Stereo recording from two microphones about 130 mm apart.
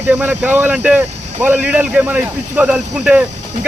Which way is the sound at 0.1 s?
10° right (ahead or behind).